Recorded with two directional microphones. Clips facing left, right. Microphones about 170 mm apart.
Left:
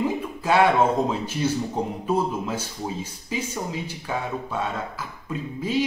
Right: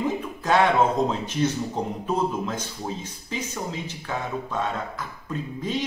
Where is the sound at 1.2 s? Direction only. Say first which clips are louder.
Even; 10° left (ahead or behind).